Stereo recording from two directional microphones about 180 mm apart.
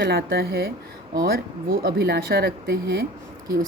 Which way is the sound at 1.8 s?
65° right (ahead or behind).